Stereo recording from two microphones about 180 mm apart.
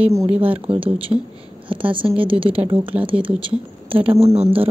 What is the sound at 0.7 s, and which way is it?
A woman's voice, 30° right (ahead or behind).